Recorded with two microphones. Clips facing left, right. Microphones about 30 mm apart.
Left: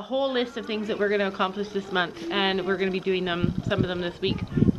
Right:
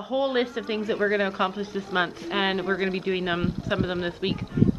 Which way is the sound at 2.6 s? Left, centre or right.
Centre.